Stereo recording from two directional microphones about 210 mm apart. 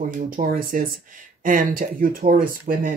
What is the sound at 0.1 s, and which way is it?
Speech, 45° right (ahead or behind).